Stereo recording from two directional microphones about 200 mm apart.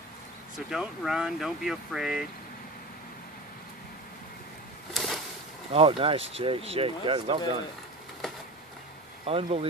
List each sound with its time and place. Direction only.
0.7 s speech: centre (ahead or behind)
4.9 s a sound: centre (ahead or behind)
5.7 s speech: 25° right (ahead or behind)
9.2 s speech: 30° right (ahead or behind)